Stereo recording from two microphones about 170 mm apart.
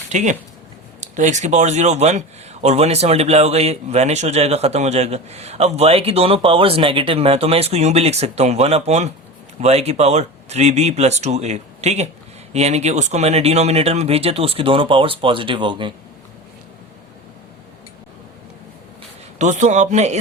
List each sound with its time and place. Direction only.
0.1 s speech: 45° right (ahead or behind); by 15.9 s 30° right (ahead or behind)
19.4 s a man's voice: 45° right (ahead or behind)